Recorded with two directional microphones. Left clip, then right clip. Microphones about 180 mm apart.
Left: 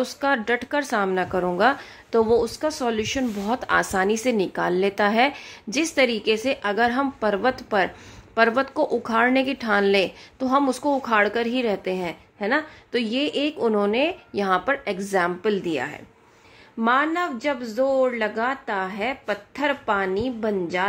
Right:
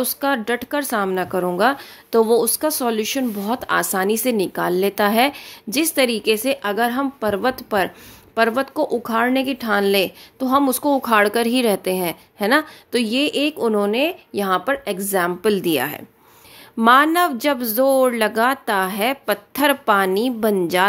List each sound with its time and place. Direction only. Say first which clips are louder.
0.0 s speech: right 2 dB; 20° right (ahead or behind); by 20.8 s 45° right (ahead or behind)